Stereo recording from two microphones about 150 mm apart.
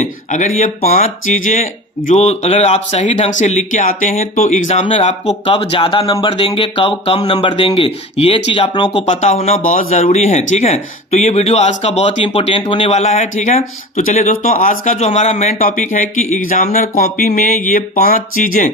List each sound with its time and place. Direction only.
0.0 s a sound: 55° left (ahead or behind)
0.8 s speech: 45° left (ahead or behind)
4.9 s speech: 40° left (ahead or behind)
8.9 s speech: 45° left (ahead or behind)
17.0 s speech: 60° left (ahead or behind)